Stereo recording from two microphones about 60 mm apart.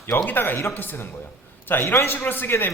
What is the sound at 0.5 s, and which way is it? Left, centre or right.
Speech, left.